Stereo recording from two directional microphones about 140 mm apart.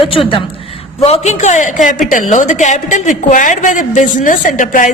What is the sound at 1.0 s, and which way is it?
A woman's voice, 50° left (ahead or behind).